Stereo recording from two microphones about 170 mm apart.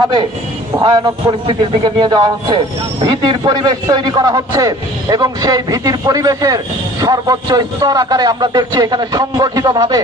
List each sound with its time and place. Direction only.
0.8 s a man's voice: 25° right (ahead or behind)